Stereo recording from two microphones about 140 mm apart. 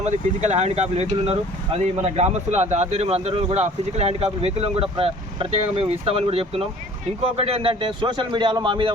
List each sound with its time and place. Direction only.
0.0 s a man's voice: 55° right (ahead or behind); by 8.9 s 35° right (ahead or behind)